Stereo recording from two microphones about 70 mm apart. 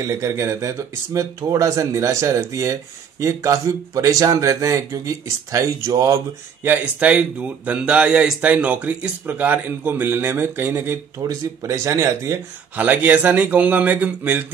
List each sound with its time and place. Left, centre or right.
0.0 s speech: right
6.6 s speech: right
11.2 s speech: right
11.6 s speech: right
12.7 s speech: right